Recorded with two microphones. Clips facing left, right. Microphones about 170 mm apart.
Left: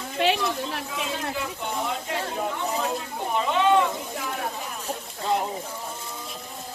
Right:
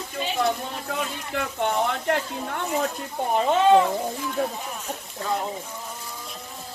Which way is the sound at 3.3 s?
40° right (ahead or behind).